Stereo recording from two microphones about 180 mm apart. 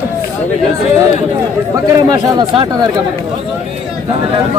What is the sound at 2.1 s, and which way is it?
Speech, 25° right (ahead or behind).